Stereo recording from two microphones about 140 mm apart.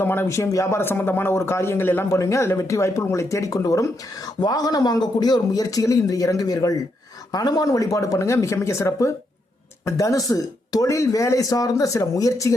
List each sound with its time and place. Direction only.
0.0 s speech: 15° left (ahead or behind)